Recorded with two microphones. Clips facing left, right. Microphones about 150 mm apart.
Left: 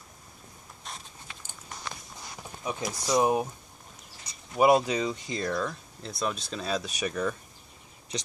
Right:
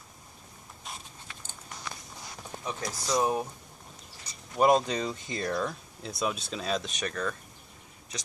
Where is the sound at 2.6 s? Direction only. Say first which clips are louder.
Left 3 dB; 10° left (ahead or behind).